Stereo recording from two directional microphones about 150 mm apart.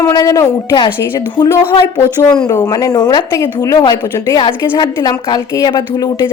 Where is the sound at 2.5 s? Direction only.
25° left (ahead or behind).